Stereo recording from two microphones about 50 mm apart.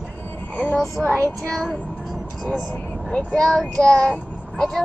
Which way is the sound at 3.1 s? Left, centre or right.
Centre.